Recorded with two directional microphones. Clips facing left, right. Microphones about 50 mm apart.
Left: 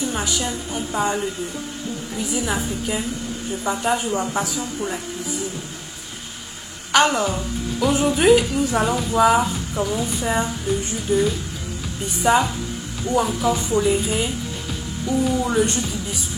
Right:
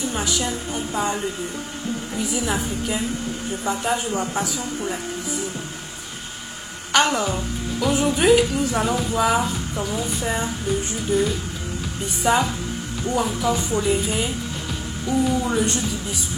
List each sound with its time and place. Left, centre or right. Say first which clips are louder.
0.1 s speech: even; centre
2.3 s speech: left 2 dB; centre
6.9 s speech: left 2 dB; centre